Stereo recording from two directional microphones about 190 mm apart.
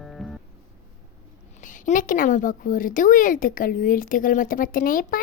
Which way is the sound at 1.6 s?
45° left (ahead or behind).